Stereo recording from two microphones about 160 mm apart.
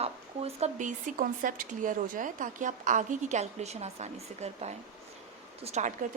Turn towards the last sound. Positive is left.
turn(degrees=-45)  # may be behind; listen again after turning